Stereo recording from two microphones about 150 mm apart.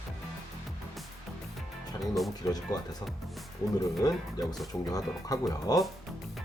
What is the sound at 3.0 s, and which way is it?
Speech, centre (ahead or behind).